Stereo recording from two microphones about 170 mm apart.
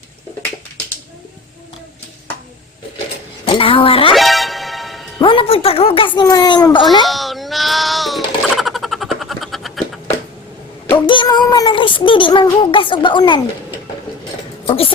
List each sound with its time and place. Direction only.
3.4 s speech: 30° left (ahead or behind)
4.1 s music: centre (ahead or behind)
5.2 s child singing: 30° left (ahead or behind)
7.0 s a sound: centre (ahead or behind)
10.9 s child singing: 30° left (ahead or behind)
14.7 s a sound: 30° left (ahead or behind)